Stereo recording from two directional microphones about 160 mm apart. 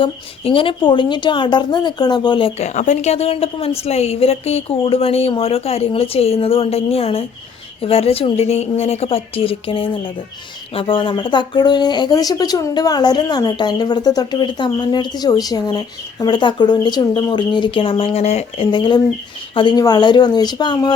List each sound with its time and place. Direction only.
0.0 s speech: 35° left (ahead or behind)
2.6 s a woman's voice: 45° left (ahead or behind); by 20.9 s 25° left (ahead or behind)